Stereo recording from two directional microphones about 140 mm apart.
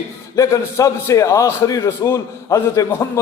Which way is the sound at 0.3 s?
20° left (ahead or behind).